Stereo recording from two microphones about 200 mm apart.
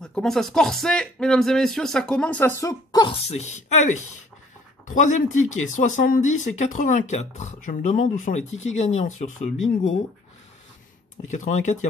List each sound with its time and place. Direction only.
0.0 s speech: 5° left (ahead or behind)
2.6 s speech: 20° left (ahead or behind)
3.3 s speech: 35° left (ahead or behind)
11.2 s speech: 35° left (ahead or behind)